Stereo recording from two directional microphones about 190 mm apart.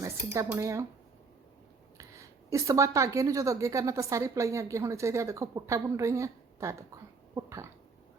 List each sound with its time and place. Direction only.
0.4 s a woman's voice: 10° right (ahead or behind)
2.0 s a woman's voice: 15° right (ahead or behind)